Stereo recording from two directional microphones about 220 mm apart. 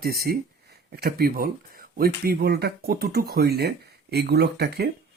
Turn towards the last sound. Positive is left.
turn(degrees=-45)  # may be behind; listen again after turning